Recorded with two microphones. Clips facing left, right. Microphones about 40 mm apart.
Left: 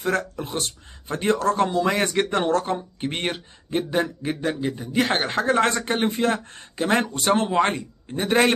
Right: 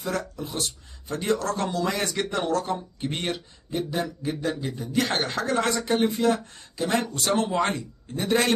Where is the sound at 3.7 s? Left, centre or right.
Left.